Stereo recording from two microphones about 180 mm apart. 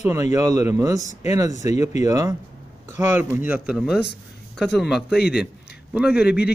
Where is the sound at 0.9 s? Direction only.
40° left (ahead or behind).